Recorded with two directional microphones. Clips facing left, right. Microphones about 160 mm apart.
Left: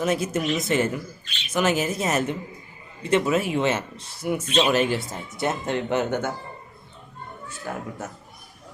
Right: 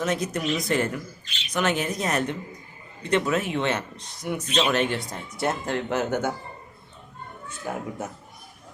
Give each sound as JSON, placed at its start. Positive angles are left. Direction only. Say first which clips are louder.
{"t": 0.0, "sound": "speech", "louder": "left 2 dB", "side_deg": 5}
{"t": 7.6, "sound": "speech", "louder": "right 1 dB", "side_deg": -15}